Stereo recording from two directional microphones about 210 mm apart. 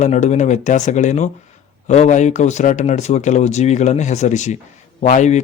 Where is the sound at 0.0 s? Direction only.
35° left (ahead or behind).